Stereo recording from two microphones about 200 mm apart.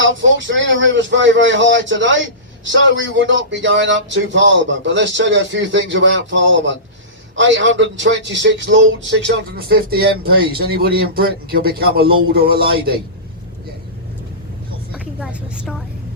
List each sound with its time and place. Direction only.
0.0 s speech: 70° right (ahead or behind); by 13.0 s 50° right (ahead or behind)
14.9 s vehicle: 5° right (ahead or behind)